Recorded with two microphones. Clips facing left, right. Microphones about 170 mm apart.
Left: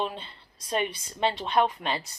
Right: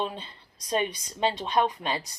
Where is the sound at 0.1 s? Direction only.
20° right (ahead or behind).